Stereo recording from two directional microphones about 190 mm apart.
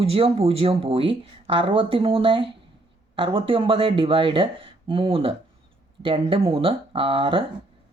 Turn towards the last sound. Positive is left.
turn(degrees=-25)  # may be behind; listen again after turning